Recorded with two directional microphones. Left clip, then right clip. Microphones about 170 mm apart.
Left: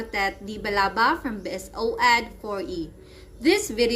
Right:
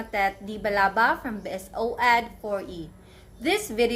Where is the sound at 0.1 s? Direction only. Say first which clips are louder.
Right 2 dB; 15° right (ahead or behind).